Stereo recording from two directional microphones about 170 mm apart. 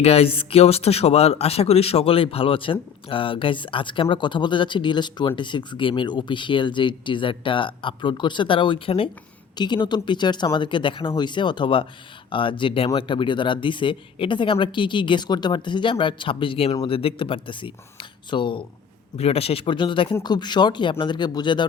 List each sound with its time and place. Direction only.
0.0 s speech: 35° left (ahead or behind)